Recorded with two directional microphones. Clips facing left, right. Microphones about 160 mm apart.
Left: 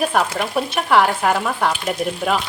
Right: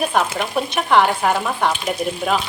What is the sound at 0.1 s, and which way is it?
Speech, centre (ahead or behind).